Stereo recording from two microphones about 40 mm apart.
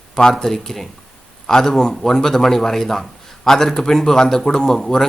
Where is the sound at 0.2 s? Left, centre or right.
Centre.